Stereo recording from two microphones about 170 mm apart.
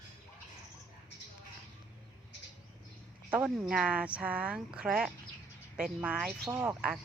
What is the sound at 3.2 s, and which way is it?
Speech, 5° right (ahead or behind).